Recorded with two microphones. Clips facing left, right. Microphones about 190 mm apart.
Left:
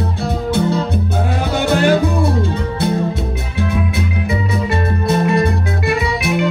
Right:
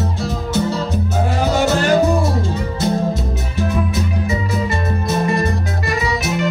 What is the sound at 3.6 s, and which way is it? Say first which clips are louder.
Music: even; 60° left (ahead or behind).